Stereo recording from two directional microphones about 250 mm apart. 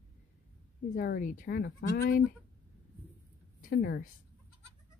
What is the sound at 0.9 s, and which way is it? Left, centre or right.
Speech, left.